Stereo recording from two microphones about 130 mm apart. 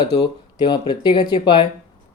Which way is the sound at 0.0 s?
30° left (ahead or behind).